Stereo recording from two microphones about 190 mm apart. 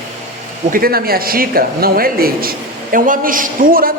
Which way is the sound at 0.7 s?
50° right (ahead or behind).